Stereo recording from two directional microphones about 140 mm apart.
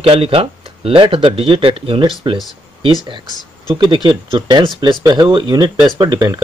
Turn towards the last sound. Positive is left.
turn(degrees=-25)  # may be behind; listen again after turning